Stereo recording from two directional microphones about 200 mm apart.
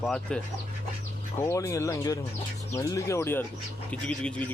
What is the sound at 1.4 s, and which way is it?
Speech, 15° left (ahead or behind).